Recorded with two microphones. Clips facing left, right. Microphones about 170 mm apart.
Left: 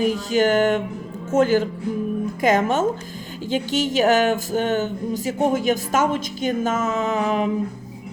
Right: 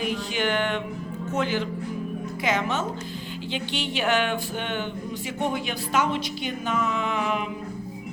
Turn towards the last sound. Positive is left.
turn(degrees=40)  # may be behind; listen again after turning